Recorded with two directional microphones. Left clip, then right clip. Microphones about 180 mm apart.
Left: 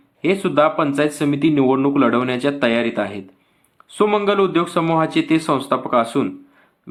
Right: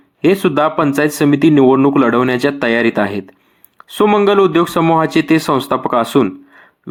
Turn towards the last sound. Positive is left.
turn(degrees=-35)  # may be behind; listen again after turning